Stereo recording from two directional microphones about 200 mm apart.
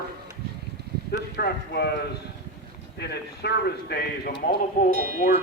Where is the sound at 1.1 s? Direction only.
50° left (ahead or behind).